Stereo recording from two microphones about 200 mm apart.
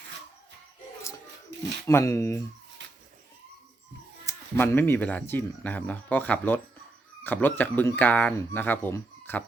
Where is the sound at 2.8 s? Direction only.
65° right (ahead or behind).